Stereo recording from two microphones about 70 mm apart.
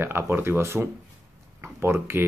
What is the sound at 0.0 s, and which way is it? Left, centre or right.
Speech, right.